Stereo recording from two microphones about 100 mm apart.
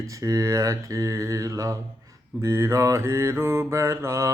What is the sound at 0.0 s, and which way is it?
Mantra, 35° right (ahead or behind).